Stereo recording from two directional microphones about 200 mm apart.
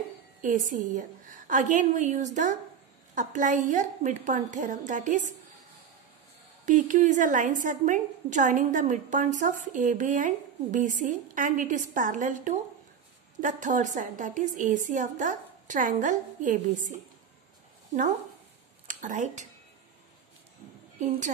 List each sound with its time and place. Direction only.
0.4 s a woman's voice: 40° right (ahead or behind)
6.6 s a woman's voice: 40° right (ahead or behind)
18.9 s speech: 40° right (ahead or behind)